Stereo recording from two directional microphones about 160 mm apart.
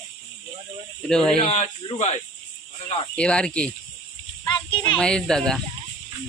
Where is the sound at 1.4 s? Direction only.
45° left (ahead or behind).